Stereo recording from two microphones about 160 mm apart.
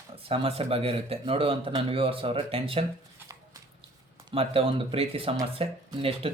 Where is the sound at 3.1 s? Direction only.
20° right (ahead or behind).